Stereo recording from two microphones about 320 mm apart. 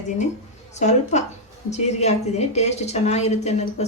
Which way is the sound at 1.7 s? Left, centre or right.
Left.